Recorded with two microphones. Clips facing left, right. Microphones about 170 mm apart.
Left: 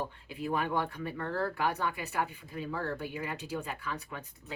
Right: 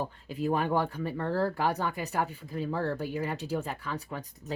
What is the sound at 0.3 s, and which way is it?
Speech, 40° right (ahead or behind).